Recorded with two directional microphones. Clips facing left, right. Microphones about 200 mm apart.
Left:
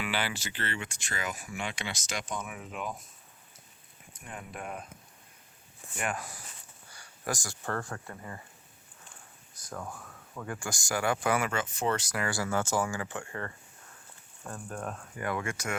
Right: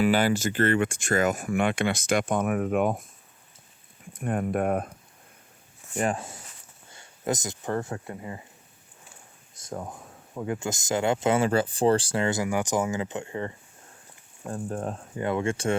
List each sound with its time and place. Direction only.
0.0 s speech: 45° right (ahead or behind)
4.1 s speech: 55° right (ahead or behind)
6.0 s speech: 30° right (ahead or behind)
9.6 s speech: 25° right (ahead or behind)